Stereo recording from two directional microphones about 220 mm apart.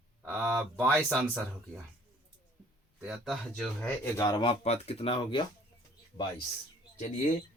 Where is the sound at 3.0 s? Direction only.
Centre (ahead or behind); by 5.4 s 25° left (ahead or behind).